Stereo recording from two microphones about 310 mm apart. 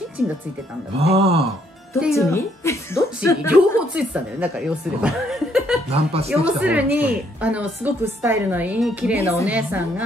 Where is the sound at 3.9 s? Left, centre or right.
Centre.